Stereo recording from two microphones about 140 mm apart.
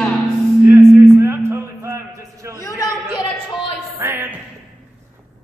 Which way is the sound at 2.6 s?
25° left (ahead or behind).